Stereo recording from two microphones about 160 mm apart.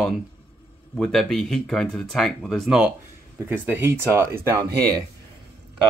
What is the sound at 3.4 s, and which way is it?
Speech, 15° right (ahead or behind).